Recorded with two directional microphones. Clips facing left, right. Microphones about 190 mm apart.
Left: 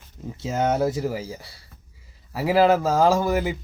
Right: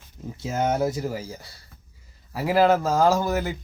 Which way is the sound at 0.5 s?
Centre (ahead or behind).